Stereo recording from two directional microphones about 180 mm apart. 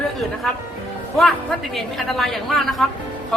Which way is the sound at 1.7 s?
Centre (ahead or behind).